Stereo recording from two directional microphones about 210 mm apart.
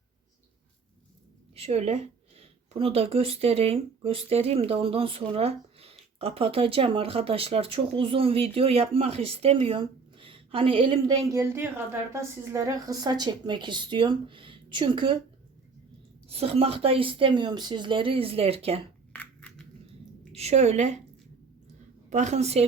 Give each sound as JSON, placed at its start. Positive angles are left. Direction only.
{"t": 1.5, "sound": "speech", "side_deg": -30}
{"t": 16.3, "sound": "speech", "side_deg": -30}
{"t": 19.1, "sound": "crushing", "side_deg": 5}
{"t": 20.3, "sound": "a woman's voice", "side_deg": -30}
{"t": 22.1, "sound": "a woman's voice", "side_deg": -35}